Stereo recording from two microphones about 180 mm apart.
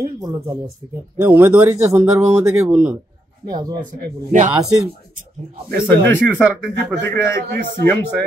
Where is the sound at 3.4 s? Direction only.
20° right (ahead or behind).